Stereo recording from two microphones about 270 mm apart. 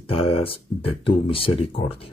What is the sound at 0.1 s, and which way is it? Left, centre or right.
Speech, left.